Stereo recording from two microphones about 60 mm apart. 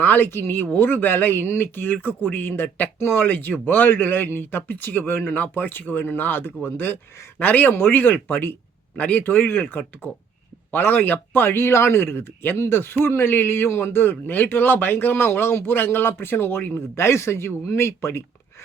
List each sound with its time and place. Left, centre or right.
0.0 s speech: left
16.9 s speech: left